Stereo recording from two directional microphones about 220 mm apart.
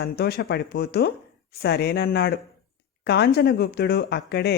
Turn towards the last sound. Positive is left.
turn(degrees=50)  # may be behind; listen again after turning